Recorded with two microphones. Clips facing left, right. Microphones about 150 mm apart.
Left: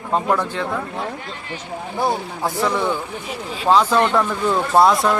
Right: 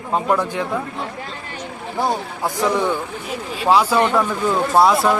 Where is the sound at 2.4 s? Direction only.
15° right (ahead or behind).